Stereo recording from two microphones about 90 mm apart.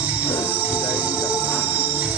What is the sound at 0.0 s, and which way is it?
Music, 15° right (ahead or behind).